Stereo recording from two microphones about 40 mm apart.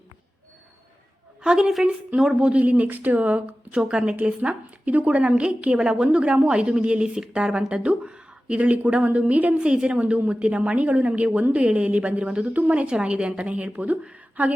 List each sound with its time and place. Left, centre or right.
1.4 s a sound: centre
2.4 s a woman's voice: right
3.8 s speech: right
4.4 s a woman's voice: right
5.8 s a woman's voice: right
9.6 s a woman's voice: right
14.4 s a sound: right